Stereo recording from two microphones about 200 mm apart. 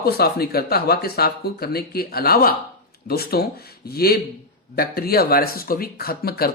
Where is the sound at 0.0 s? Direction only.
50° left (ahead or behind).